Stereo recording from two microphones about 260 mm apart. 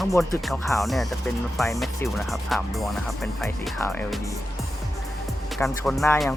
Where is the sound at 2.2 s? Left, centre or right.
Centre.